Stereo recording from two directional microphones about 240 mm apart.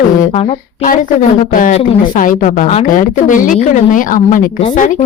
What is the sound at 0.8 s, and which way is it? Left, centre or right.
A woman's voice, left.